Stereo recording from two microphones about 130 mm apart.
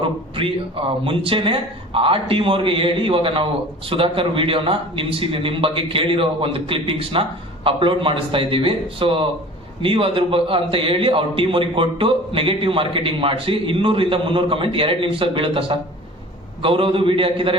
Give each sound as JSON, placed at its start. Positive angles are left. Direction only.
{"t": 0.0, "sound": "a man's voice", "side_deg": -45}